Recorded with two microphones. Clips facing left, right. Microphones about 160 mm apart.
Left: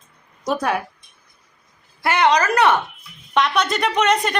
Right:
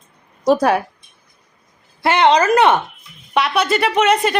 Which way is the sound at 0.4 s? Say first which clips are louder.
Right 7 dB; 35° right (ahead or behind).